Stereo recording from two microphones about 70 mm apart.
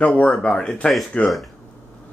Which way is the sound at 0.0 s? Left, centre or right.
Centre.